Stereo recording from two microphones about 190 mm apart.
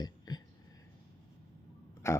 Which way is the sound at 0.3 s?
20° left (ahead or behind).